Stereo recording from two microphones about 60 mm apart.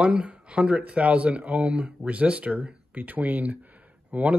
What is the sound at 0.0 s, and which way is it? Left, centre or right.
Speech, right.